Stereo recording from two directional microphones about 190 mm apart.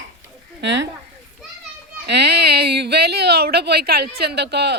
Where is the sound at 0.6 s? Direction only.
70° right (ahead or behind).